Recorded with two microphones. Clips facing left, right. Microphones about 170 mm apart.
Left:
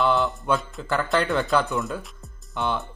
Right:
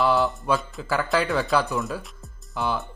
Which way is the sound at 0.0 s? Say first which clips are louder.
Right 1 dB; centre (ahead or behind).